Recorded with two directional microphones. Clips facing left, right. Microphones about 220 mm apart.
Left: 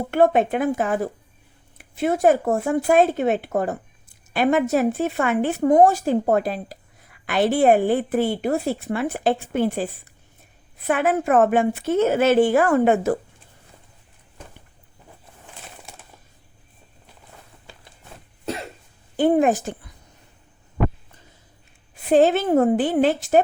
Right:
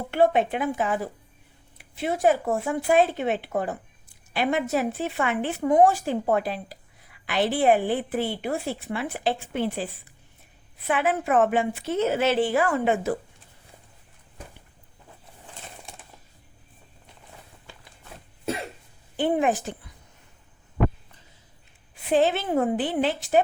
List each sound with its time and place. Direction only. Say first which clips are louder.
0.1 s speech: left 3 dB; 50° left (ahead or behind)
19.1 s speech: left 6 dB; 45° left (ahead or behind)
21.9 s speech: left 5 dB; 45° left (ahead or behind)